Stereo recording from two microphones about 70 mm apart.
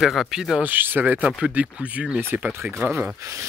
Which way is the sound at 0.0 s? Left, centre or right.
Centre.